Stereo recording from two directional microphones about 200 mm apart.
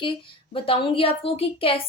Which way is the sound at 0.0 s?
25° left (ahead or behind).